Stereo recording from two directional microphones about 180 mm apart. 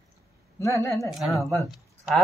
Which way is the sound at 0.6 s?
15° left (ahead or behind).